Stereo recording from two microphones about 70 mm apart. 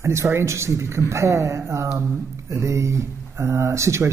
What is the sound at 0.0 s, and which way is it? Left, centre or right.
A man's voice, right.